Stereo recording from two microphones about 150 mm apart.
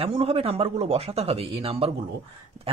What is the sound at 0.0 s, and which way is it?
Speech, 40° right (ahead or behind).